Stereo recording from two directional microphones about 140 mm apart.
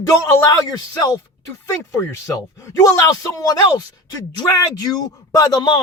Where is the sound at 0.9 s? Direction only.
25° left (ahead or behind).